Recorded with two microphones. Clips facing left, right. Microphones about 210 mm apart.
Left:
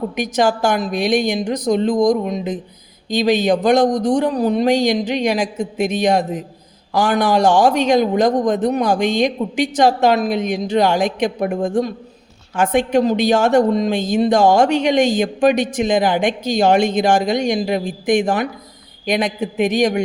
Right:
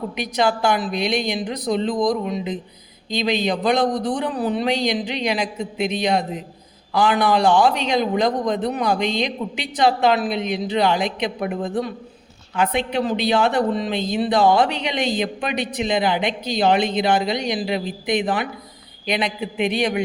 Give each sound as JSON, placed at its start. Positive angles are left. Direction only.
{"t": 0.2, "sound": "speech", "side_deg": 45}